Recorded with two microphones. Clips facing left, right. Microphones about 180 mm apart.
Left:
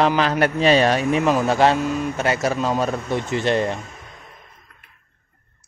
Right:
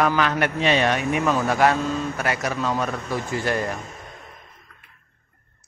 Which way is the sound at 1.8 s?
15° left (ahead or behind).